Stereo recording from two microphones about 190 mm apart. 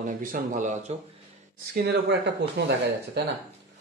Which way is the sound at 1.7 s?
60° right (ahead or behind).